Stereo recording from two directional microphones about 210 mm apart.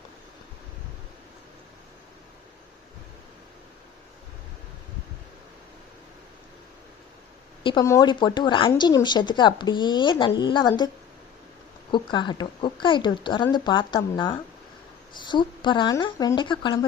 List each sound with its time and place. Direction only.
7.6 s speech: 20° left (ahead or behind)
11.9 s speech: 20° left (ahead or behind)